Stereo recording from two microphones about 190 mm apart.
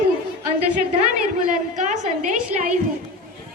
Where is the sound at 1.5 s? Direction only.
40° right (ahead or behind).